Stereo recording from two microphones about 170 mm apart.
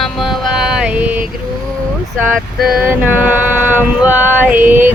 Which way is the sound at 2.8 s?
10° right (ahead or behind).